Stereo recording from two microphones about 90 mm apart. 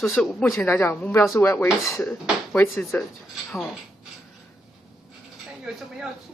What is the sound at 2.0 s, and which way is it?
Speech, 5° left (ahead or behind).